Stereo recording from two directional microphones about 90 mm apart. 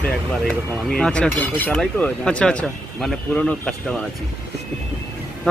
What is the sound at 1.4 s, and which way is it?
Speech, 20° left (ahead or behind).